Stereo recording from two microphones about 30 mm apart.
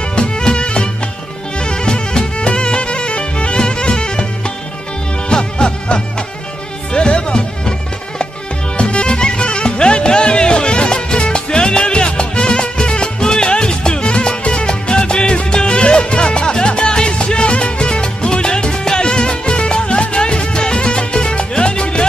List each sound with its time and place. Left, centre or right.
0.1 s music: left
5.3 s music: left
8.7 s music: left